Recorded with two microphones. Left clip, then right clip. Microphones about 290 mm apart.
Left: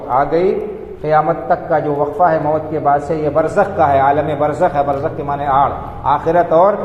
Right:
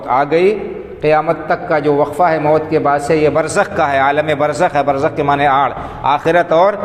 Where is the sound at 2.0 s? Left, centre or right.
Right.